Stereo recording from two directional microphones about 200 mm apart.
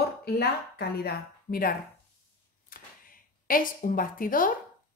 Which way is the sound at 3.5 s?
45° left (ahead or behind).